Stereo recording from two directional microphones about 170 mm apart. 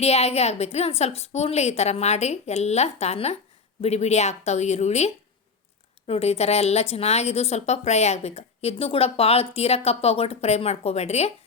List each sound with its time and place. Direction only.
0.0 s a woman's voice: 40° left (ahead or behind)